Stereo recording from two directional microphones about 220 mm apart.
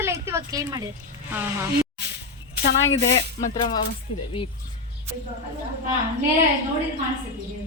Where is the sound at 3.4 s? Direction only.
20° left (ahead or behind).